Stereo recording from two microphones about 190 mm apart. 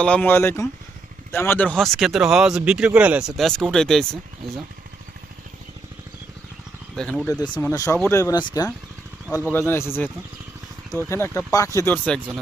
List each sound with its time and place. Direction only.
0.0 s speech: 5° left (ahead or behind)
6.9 s speech: 5° left (ahead or behind)
7.3 s speech: 20° left (ahead or behind)
10.9 s speech: 15° left (ahead or behind)